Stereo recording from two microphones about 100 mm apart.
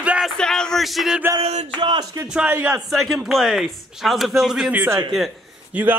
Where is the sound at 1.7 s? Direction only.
50° right (ahead or behind).